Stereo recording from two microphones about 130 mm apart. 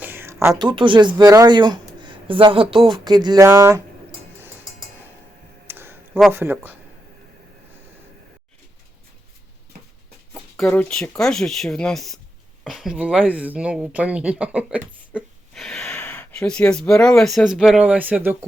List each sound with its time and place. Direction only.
0.0 s a sound: 15° right (ahead or behind)
0.5 s speech: 35° right (ahead or behind)
1.2 s speech: 25° right (ahead or behind)
3.4 s speech: 20° right (ahead or behind)
5.6 s a sound: 15° right (ahead or behind)
6.3 s speech: 20° right (ahead or behind)
10.6 s speech: 10° left (ahead or behind); by 15.2 s 10° right (ahead or behind)
15.5 s speech: centre (ahead or behind); by 18.3 s 15° right (ahead or behind)